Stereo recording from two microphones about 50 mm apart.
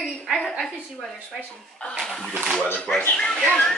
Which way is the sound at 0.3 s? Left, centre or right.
Centre.